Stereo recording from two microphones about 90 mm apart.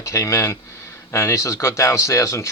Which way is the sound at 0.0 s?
35° left (ahead or behind).